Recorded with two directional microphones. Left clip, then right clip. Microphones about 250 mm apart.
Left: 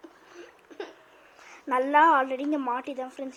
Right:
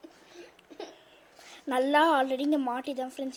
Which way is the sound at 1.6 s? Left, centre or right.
Right.